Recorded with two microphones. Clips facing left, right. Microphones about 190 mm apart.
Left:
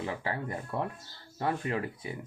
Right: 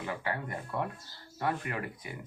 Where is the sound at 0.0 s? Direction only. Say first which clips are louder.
Left 2 dB; 30° left (ahead or behind).